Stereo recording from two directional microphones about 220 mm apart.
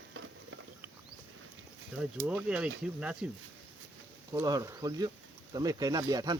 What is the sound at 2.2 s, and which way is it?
Speech, 5° right (ahead or behind).